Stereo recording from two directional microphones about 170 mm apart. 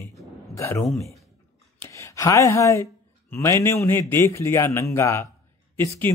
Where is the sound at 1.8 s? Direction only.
20° left (ahead or behind).